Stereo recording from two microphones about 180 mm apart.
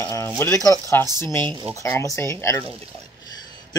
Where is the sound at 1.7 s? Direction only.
15° left (ahead or behind).